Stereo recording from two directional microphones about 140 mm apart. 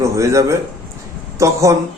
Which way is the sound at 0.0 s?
20° right (ahead or behind).